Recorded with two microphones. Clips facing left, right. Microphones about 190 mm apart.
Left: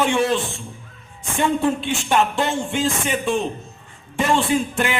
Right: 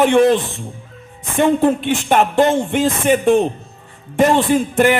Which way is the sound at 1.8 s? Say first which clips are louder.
Right 4 dB; 55° right (ahead or behind).